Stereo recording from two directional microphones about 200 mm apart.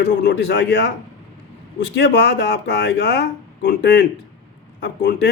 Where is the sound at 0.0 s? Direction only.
55° left (ahead or behind).